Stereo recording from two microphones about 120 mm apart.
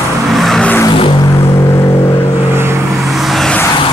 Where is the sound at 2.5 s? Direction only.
20° right (ahead or behind).